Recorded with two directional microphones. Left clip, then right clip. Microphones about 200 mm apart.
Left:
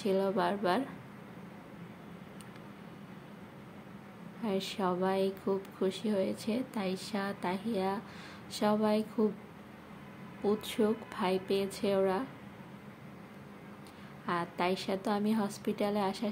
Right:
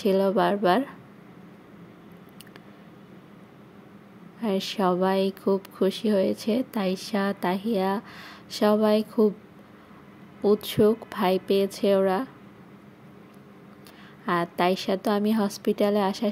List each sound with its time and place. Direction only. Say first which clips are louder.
0.0 s speech: right 8 dB; 35° right (ahead or behind)
4.4 s speech: right 8 dB; 35° right (ahead or behind)
10.4 s speech: right 10 dB; 35° right (ahead or behind)
14.2 s speech: right 9 dB; 40° right (ahead or behind)